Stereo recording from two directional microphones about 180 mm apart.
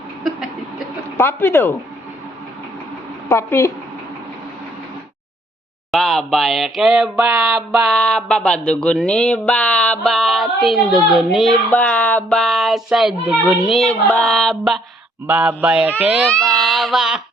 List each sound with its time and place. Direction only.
1.1 s speech: 10° left (ahead or behind)
3.2 s a woman's voice: 15° left (ahead or behind)
5.9 s a sound: centre (ahead or behind)
15.3 s a man's voice: 10° right (ahead or behind)
16.2 s speech: 5° left (ahead or behind)